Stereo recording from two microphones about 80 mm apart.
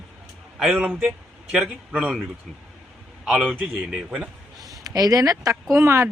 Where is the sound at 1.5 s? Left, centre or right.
Centre.